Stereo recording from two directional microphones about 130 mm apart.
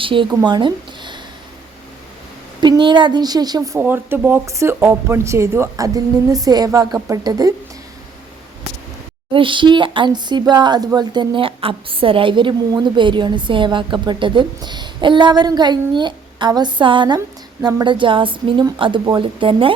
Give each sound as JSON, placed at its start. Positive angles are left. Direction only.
{"t": 0.0, "sound": "speech", "side_deg": -40}
{"t": 0.4, "sound": "a sound", "side_deg": -35}
{"t": 2.6, "sound": "a woman's voice", "side_deg": -35}
{"t": 3.8, "sound": "speech", "side_deg": -15}
{"t": 9.3, "sound": "a woman's voice", "side_deg": -40}